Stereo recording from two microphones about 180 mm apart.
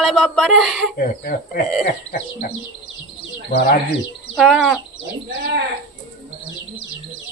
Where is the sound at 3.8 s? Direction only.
65° left (ahead or behind).